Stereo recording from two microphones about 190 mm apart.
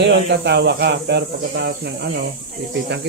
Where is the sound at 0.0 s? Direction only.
60° right (ahead or behind).